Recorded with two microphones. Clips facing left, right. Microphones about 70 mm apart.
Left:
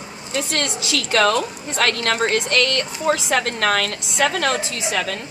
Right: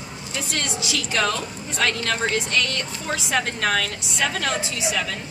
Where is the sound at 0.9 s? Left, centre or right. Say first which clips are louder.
Left 7 dB; left.